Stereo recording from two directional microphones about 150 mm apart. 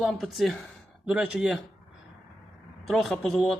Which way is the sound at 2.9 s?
Centre (ahead or behind).